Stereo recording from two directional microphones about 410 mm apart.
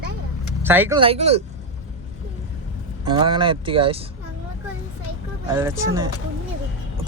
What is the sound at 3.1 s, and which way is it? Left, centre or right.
Speech, centre.